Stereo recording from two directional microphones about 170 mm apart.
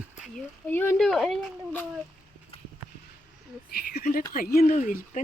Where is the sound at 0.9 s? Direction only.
Centre (ahead or behind).